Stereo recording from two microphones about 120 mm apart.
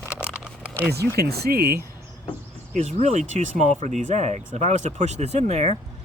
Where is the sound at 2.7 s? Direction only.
70° right (ahead or behind).